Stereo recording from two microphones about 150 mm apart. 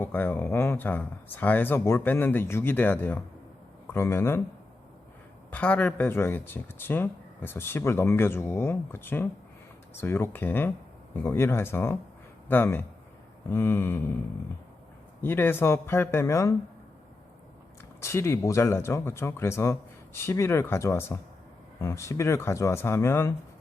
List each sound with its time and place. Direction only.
0.0 s speech: 10° left (ahead or behind)
5.5 s speech: 10° left (ahead or behind)
15.2 s speech: 15° left (ahead or behind)
18.0 s speech: 20° left (ahead or behind)